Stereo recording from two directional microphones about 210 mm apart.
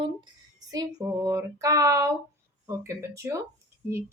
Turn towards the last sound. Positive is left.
turn(degrees=-10)  # may be behind; listen again after turning